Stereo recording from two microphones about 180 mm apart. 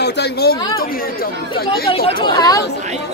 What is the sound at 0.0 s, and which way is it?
Speech, 65° left (ahead or behind).